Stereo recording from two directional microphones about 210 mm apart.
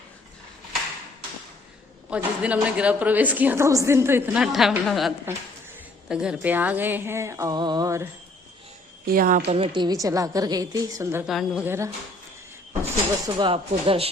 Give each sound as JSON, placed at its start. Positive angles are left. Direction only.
{"t": 2.0, "sound": "a woman's voice", "side_deg": -5}
{"t": 9.0, "sound": "a woman's voice", "side_deg": -40}
{"t": 9.7, "sound": "a woman's voice", "side_deg": -20}
{"t": 11.3, "sound": "a woman's voice", "side_deg": 0}
{"t": 13.2, "sound": "speech", "side_deg": -25}